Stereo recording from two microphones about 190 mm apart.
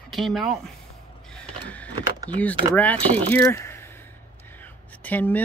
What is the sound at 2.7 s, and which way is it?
Speech, 10° left (ahead or behind).